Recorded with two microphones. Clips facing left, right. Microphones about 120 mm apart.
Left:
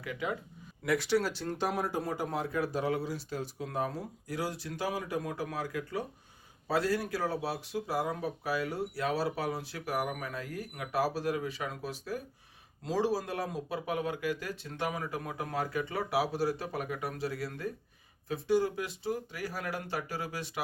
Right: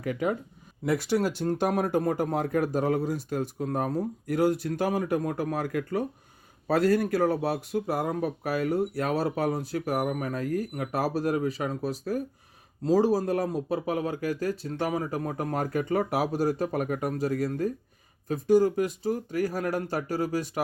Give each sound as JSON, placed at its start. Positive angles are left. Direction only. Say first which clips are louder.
{"t": 0.0, "sound": "speech", "louder": "right 8 dB", "side_deg": -45}